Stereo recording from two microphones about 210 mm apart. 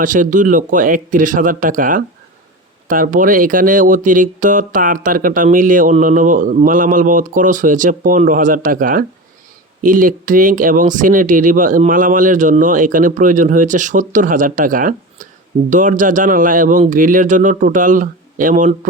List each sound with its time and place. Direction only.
0.0 s speech: 40° right (ahead or behind)